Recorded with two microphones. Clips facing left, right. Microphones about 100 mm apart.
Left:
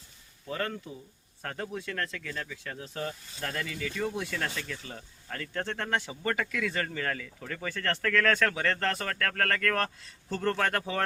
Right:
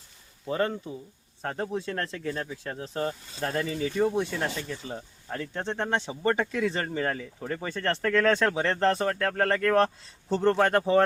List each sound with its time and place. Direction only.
0.4 s speech: 25° right (ahead or behind)